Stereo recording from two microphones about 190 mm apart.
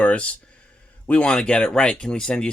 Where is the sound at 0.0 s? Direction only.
5° left (ahead or behind).